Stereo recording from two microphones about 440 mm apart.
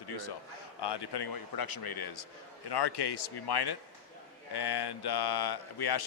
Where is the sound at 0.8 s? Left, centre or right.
Left.